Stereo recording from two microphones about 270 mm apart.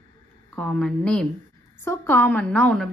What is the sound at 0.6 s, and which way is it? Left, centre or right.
A woman's voice, centre.